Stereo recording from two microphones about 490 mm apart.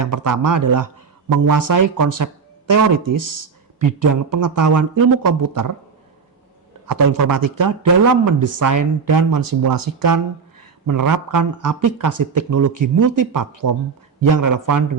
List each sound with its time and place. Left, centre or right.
0.0 s speech: right
7.1 s speech: right